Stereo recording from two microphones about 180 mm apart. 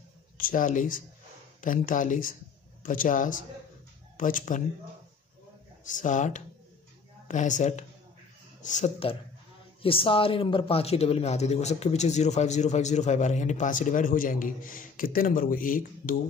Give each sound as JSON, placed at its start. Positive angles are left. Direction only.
{"t": 0.4, "sound": "speech", "side_deg": 50}
{"t": 5.9, "sound": "speech", "side_deg": 45}
{"t": 9.8, "sound": "speech", "side_deg": 30}